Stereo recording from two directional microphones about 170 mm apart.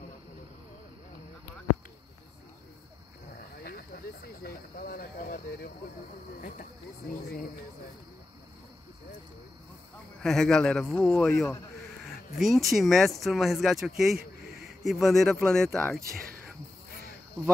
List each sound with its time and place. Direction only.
3.6 s speech: 60° left (ahead or behind)
10.2 s speech: 5° left (ahead or behind)